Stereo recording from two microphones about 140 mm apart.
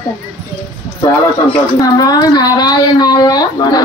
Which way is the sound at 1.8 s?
30° left (ahead or behind).